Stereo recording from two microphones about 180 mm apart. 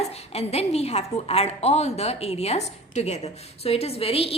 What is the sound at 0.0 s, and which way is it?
A woman's voice, 35° left (ahead or behind).